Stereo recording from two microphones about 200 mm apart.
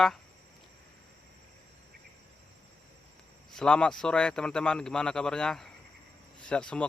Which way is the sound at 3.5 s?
5° left (ahead or behind).